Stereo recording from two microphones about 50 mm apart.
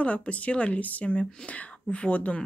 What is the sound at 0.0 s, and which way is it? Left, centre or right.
A woman's voice, left.